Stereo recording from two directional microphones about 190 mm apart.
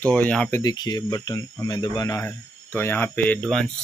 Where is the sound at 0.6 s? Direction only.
20° left (ahead or behind).